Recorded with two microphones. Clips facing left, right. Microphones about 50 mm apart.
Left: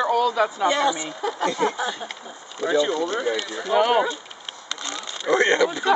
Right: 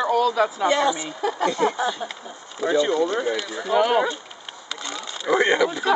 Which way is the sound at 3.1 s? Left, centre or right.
Centre.